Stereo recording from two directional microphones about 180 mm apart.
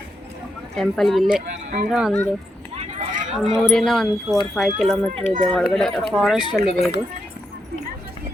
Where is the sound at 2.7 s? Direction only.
45° right (ahead or behind).